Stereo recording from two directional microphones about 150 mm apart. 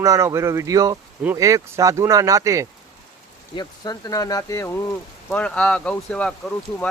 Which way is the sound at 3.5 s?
25° left (ahead or behind).